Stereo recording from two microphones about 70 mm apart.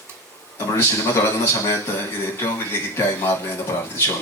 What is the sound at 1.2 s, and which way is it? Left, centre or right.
A man's voice, left.